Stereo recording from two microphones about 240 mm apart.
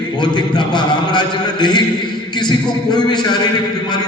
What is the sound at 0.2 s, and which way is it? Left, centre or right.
A man's voice, centre.